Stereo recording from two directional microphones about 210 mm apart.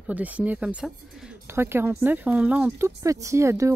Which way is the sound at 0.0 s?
5° right (ahead or behind).